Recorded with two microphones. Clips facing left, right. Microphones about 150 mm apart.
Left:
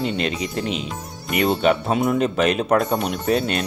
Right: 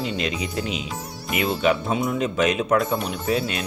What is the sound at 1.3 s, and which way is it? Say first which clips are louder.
Speech: left 3 dB; 50° left (ahead or behind).